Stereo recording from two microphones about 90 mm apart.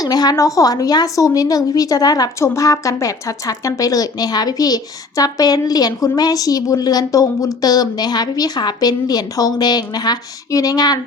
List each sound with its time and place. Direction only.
0.0 s speech: 45° left (ahead or behind)